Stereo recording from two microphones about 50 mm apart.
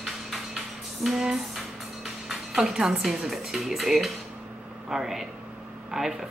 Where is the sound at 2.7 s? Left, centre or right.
Centre.